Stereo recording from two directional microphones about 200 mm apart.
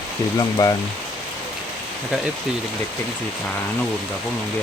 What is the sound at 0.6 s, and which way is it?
Speech, 20° left (ahead or behind).